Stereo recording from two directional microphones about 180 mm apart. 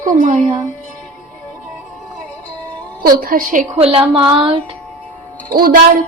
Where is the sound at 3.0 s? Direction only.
55° right (ahead or behind).